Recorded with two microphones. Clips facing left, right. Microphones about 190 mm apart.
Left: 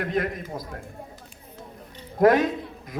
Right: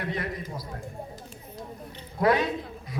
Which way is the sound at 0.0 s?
50° left (ahead or behind).